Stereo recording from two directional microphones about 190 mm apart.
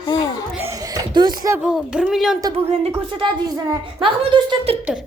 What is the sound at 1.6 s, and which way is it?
Speech, 5° right (ahead or behind).